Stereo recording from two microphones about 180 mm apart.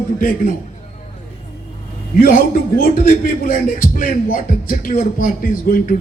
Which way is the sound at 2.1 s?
50° left (ahead or behind).